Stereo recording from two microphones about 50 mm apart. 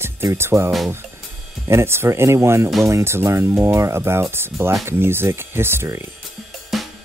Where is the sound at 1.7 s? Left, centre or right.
Right.